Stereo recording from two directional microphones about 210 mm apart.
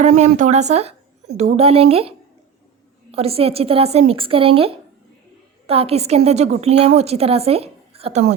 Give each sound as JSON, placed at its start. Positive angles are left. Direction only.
{"t": 0.0, "sound": "a woman's voice", "side_deg": -35}